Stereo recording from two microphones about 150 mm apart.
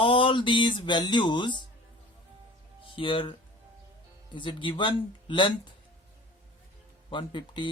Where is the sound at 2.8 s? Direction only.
35° left (ahead or behind).